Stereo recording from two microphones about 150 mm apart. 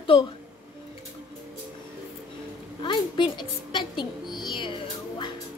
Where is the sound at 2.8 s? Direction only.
30° left (ahead or behind).